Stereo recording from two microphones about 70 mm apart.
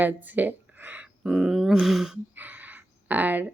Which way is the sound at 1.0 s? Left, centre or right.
Centre.